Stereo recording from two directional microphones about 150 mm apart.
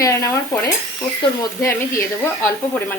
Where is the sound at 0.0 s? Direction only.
25° left (ahead or behind).